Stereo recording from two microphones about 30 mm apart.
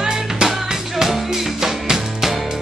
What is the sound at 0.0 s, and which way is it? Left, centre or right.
Music, centre.